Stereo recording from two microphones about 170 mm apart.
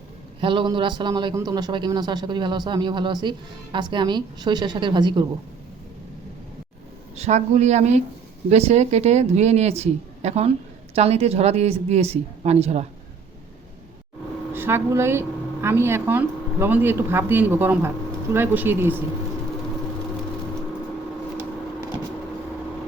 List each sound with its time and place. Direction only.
0.4 s a man's voice: 30° right (ahead or behind)
7.2 s speech: 40° right (ahead or behind)
14.5 s a woman's voice: 15° right (ahead or behind)